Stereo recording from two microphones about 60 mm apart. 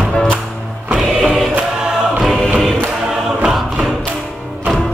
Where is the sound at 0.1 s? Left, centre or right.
Centre.